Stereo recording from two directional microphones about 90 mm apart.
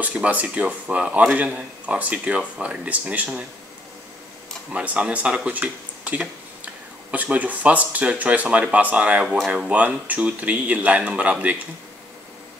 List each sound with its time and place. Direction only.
0.0 s speech: 15° right (ahead or behind)
4.7 s speech: 15° right (ahead or behind)